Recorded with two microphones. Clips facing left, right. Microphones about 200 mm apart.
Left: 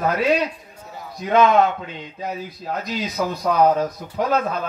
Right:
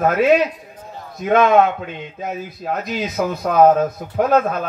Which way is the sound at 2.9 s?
55° right (ahead or behind).